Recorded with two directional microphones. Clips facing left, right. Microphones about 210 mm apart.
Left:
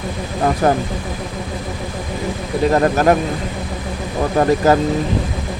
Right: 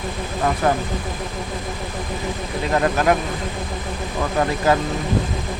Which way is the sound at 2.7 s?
40° left (ahead or behind).